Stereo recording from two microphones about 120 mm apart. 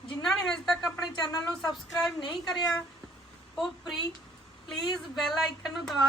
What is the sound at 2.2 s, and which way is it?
Speech, 40° left (ahead or behind).